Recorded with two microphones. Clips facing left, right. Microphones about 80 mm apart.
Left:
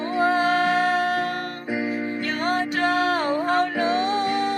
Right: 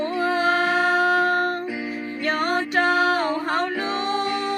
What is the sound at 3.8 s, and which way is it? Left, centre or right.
Music, left.